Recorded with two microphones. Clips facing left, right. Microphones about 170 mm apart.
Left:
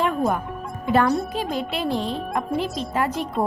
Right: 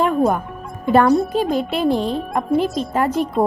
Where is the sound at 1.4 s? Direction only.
50° right (ahead or behind).